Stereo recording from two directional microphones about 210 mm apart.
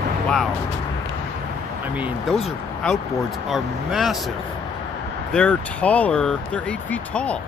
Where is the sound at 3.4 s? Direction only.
Centre (ahead or behind).